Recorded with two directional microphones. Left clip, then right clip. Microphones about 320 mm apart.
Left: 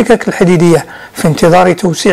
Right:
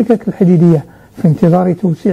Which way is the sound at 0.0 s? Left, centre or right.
Centre.